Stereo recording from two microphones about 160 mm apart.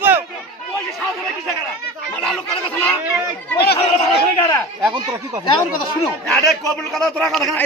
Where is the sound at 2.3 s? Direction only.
10° left (ahead or behind).